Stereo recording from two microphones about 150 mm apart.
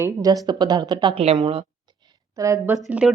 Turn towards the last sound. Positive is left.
turn(degrees=-5)  # may be behind; listen again after turning